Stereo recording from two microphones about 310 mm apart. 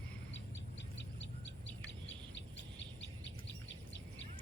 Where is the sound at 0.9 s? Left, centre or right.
Left.